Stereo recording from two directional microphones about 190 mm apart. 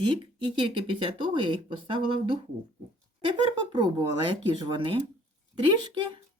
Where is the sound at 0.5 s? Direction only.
25° right (ahead or behind).